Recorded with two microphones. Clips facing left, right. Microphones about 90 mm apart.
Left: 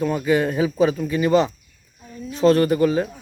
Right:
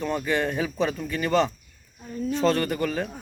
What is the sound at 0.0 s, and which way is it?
Speech, 10° left (ahead or behind).